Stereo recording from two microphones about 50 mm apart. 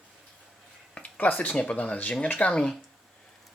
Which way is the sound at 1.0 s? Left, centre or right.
Left.